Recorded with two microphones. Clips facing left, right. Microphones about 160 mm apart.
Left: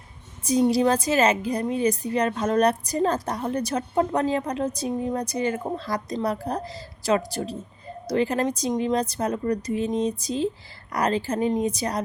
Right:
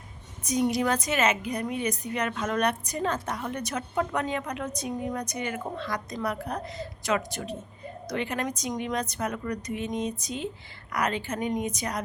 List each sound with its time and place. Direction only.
0.4 s a woman's voice: 30° left (ahead or behind)